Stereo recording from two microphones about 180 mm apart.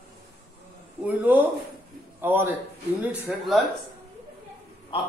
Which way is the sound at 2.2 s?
10° right (ahead or behind).